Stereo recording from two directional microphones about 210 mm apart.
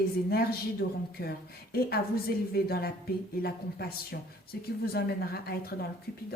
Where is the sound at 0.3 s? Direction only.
45° left (ahead or behind).